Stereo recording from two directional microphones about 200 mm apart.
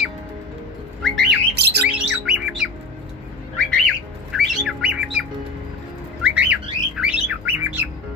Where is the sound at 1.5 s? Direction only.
55° right (ahead or behind).